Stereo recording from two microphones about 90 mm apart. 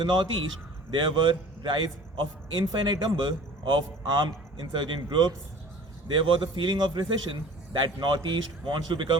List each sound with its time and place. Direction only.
0.0 s a man's voice: 60° right (ahead or behind)